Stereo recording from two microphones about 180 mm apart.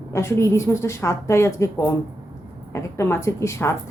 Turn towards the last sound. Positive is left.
turn(degrees=15)  # may be behind; listen again after turning